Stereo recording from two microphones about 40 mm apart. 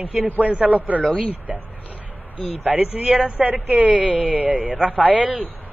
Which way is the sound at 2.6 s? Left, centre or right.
Right.